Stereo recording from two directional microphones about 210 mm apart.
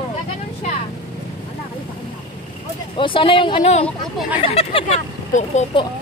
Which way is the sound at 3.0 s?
25° left (ahead or behind).